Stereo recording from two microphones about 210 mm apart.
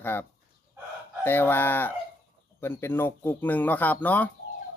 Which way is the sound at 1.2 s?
10° left (ahead or behind).